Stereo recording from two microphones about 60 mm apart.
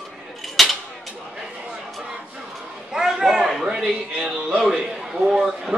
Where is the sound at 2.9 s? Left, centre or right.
Centre.